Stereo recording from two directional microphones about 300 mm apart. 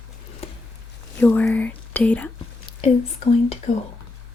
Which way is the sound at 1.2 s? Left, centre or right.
Centre.